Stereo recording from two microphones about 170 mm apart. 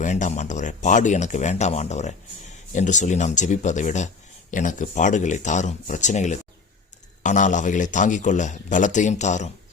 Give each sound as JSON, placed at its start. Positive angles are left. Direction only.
{"t": 0.0, "sound": "a man's voice", "side_deg": 45}